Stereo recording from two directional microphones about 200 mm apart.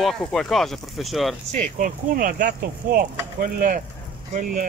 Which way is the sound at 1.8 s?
45° right (ahead or behind).